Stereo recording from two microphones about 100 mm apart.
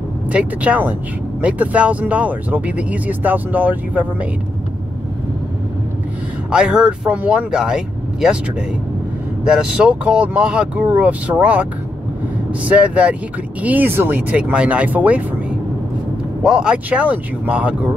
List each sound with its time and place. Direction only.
0.3 s speech: 15° right (ahead or behind)
6.5 s speech: 10° right (ahead or behind)
12.6 s speech: 15° right (ahead or behind)
16.4 s speech: 10° right (ahead or behind)